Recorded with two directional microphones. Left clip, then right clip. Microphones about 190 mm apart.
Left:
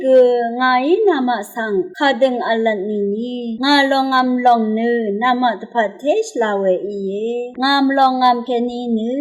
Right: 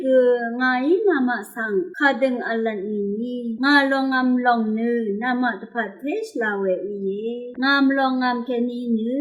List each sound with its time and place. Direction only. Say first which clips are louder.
0.0 s a sound: left 6 dB; 20° left (ahead or behind)
2.0 s speech: left 5 dB; 25° left (ahead or behind)
7.6 s speech: left 5 dB; 25° left (ahead or behind)